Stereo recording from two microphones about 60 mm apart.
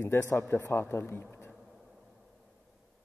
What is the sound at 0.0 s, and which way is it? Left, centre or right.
A man's voice, left.